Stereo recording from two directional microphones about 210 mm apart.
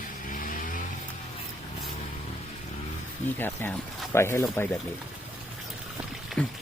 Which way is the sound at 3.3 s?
10° left (ahead or behind).